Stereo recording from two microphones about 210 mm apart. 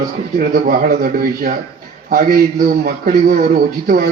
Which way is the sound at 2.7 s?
45° right (ahead or behind).